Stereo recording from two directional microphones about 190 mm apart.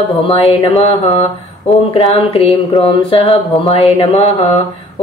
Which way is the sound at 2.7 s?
30° left (ahead or behind).